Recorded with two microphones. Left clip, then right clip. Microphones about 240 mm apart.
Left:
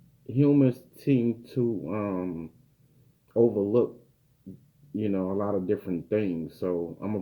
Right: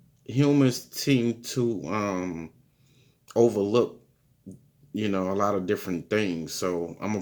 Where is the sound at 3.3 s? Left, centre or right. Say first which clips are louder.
Right 1 dB; centre.